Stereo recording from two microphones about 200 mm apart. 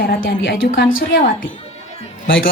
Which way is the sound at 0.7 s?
75° left (ahead or behind).